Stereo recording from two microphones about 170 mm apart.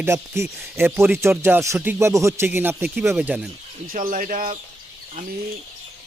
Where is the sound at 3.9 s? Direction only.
50° right (ahead or behind).